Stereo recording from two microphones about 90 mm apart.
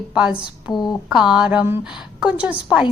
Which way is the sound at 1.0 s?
5° right (ahead or behind).